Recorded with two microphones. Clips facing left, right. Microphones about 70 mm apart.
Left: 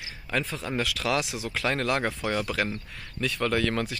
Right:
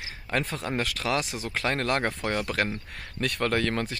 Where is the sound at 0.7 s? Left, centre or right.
Right.